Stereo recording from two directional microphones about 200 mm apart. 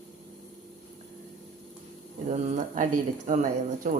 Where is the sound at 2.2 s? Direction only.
35° right (ahead or behind).